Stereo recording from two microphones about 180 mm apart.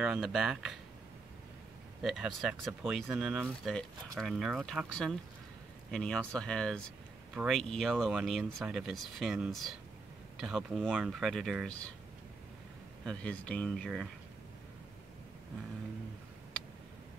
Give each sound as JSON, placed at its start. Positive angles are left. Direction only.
{"t": 0.0, "sound": "speech", "side_deg": -5}
{"t": 2.0, "sound": "speech", "side_deg": 0}
{"t": 13.0, "sound": "speech", "side_deg": 5}